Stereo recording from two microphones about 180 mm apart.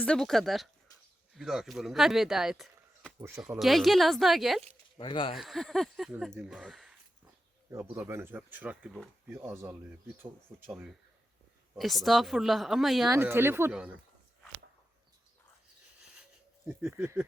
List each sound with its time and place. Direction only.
0.0 s speech: 5° left (ahead or behind)
3.2 s speech: 15° right (ahead or behind)
3.6 s speech: centre (ahead or behind)
4.9 s speech: 30° left (ahead or behind)
5.4 s speech: centre (ahead or behind)
7.7 s speech: 10° right (ahead or behind)
13.1 s speech: 10° right (ahead or behind)
16.6 s speech: 10° right (ahead or behind)